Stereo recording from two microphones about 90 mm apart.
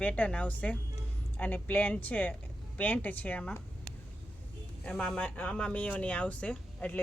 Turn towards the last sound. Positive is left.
turn(degrees=15)  # may be behind; listen again after turning